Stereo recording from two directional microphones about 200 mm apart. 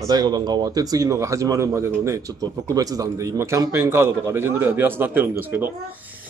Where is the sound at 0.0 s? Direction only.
20° right (ahead or behind).